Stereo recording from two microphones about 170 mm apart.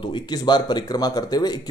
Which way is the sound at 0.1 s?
25° left (ahead or behind).